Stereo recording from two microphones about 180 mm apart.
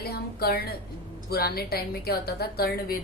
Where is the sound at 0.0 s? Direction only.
60° left (ahead or behind).